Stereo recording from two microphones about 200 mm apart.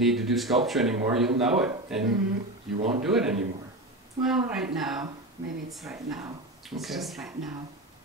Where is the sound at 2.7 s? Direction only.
30° right (ahead or behind).